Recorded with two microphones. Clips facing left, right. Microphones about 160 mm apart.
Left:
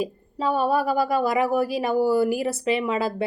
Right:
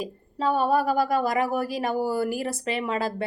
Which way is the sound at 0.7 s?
45° right (ahead or behind).